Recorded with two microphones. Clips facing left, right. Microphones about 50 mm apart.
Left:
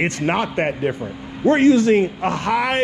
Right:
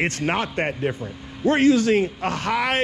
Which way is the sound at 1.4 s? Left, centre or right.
Left.